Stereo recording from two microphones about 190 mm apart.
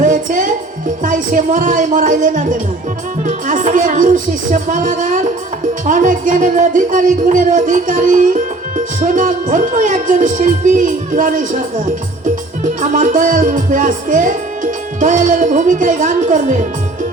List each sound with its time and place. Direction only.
0.0 s music: 45° right (ahead or behind)
12.8 s music: 40° right (ahead or behind)